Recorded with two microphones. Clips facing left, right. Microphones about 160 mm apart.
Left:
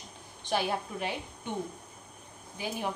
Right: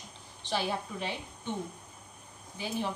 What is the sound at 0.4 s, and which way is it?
A woman's voice, 15° left (ahead or behind).